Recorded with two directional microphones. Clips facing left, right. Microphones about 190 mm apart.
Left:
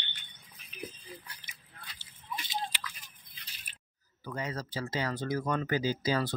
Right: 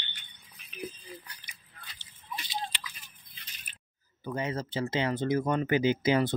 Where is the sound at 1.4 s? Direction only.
25° left (ahead or behind).